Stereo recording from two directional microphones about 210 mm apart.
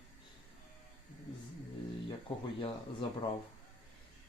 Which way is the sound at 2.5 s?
25° left (ahead or behind).